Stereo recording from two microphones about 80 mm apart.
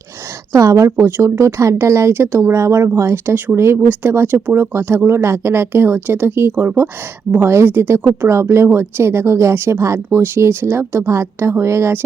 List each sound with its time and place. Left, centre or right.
0.5 s speech: right